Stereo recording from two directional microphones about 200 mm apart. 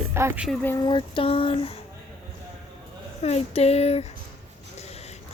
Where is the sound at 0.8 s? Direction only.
25° left (ahead or behind).